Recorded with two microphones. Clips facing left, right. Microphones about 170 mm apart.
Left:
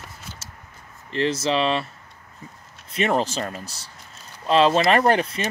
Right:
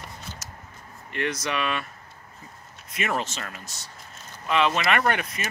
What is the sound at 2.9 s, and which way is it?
Speech, 30° left (ahead or behind).